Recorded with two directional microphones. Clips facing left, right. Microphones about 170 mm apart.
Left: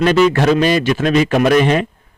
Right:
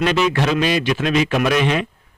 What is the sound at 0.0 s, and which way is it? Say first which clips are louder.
A man's voice: left 6 dB; 45° left (ahead or behind).